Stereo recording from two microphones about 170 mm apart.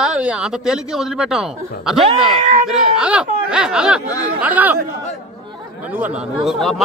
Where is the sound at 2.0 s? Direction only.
35° right (ahead or behind).